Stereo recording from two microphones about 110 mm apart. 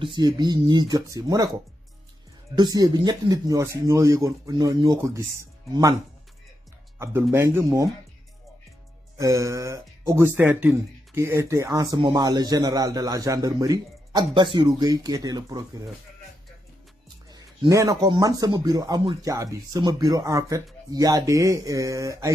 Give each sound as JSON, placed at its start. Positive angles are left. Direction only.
{"t": 0.0, "sound": "speech", "side_deg": -45}
{"t": 2.5, "sound": "speech", "side_deg": -40}
{"t": 7.0, "sound": "speech", "side_deg": -20}
{"t": 9.2, "sound": "speech", "side_deg": -30}
{"t": 14.3, "sound": "speech", "side_deg": -45}
{"t": 17.3, "sound": "speech", "side_deg": -35}